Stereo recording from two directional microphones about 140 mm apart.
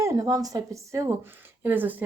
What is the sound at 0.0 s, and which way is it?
Speech, 25° right (ahead or behind).